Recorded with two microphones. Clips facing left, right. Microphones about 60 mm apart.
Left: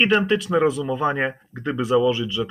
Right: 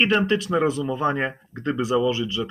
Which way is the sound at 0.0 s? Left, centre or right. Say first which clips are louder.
Left 1 dB; centre.